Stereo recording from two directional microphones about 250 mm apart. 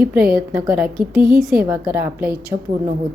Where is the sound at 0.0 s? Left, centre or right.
Centre.